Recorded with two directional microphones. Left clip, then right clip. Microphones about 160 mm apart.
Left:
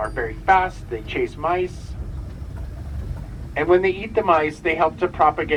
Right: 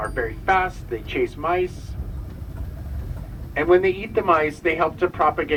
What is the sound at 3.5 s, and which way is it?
Speech, 45° right (ahead or behind).